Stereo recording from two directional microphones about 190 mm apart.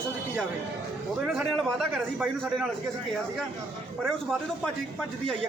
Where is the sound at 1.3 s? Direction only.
Centre (ahead or behind).